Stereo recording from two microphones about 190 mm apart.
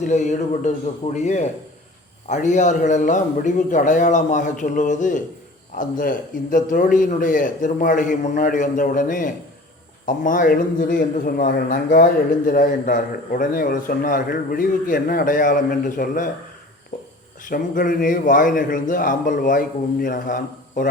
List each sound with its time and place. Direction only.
0.0 s a man's voice: 40° left (ahead or behind)
17.5 s a man's voice: 45° left (ahead or behind)